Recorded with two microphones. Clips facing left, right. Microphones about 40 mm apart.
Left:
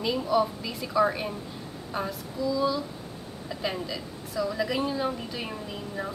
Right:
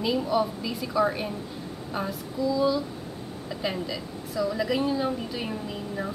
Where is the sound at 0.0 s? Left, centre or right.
Centre.